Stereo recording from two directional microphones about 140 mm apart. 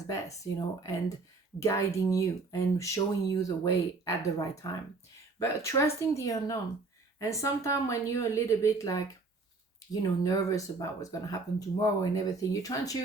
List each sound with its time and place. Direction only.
0.1 s speech: 25° left (ahead or behind)